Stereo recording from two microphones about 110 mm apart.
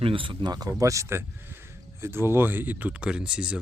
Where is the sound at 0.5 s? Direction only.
35° right (ahead or behind).